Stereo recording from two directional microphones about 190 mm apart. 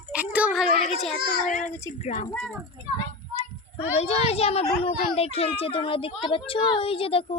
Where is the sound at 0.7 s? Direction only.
35° left (ahead or behind).